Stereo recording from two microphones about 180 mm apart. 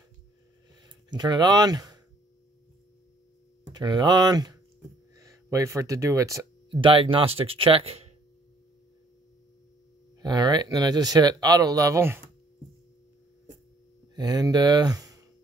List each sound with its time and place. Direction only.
0.8 s speech: 20° right (ahead or behind)
3.7 s speech: 25° right (ahead or behind)
6.8 s speech: 30° right (ahead or behind)
10.1 s speech: 20° right (ahead or behind)
14.1 s speech: 20° right (ahead or behind)